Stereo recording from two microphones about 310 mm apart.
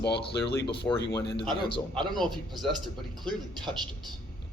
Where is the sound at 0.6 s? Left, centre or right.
Left.